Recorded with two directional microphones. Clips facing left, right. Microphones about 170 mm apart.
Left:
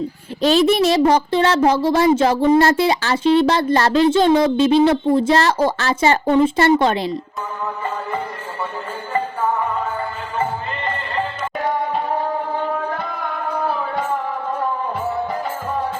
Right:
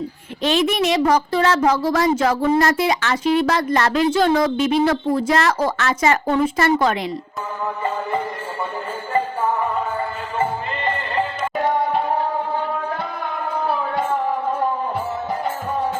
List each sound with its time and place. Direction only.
0.4 s speech: 35° left (ahead or behind)